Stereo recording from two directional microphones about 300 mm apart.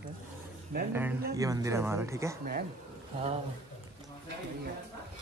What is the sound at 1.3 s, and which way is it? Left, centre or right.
A man's voice, centre.